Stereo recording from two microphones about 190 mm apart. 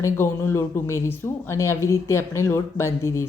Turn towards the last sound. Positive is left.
turn(degrees=15)  # may be behind; listen again after turning